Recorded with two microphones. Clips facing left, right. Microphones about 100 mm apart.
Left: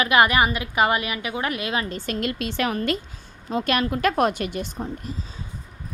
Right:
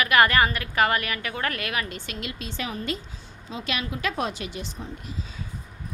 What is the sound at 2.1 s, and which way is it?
Speech, 50° left (ahead or behind).